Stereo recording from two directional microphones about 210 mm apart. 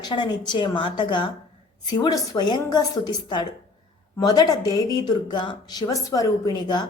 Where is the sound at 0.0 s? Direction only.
20° left (ahead or behind).